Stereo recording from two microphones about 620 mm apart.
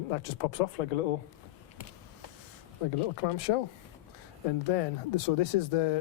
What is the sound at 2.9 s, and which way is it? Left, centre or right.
Speech, left.